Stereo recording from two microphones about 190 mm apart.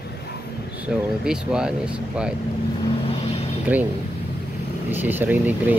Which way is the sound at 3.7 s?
10° right (ahead or behind).